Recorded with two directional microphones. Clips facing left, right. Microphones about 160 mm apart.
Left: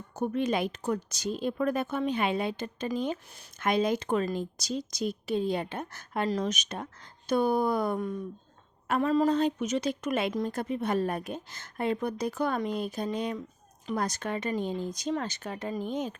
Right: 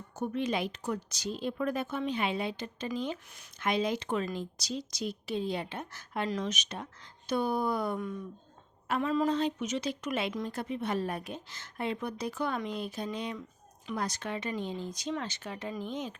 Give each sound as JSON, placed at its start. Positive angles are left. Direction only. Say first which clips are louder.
{"t": 0.2, "sound": "speech", "louder": "left 4 dB", "side_deg": 45}